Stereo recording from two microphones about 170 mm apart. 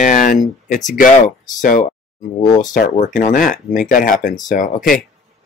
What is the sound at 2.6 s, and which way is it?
Speech, 45° left (ahead or behind).